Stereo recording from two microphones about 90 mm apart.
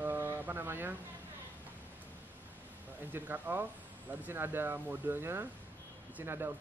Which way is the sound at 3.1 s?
20° right (ahead or behind).